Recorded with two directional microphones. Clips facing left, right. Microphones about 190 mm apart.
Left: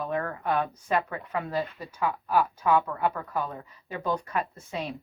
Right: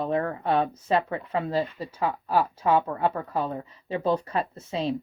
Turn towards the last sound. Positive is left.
turn(degrees=-30)  # may be behind; listen again after turning